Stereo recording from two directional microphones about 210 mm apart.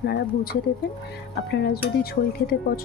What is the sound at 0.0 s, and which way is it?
Speech, 50° left (ahead or behind).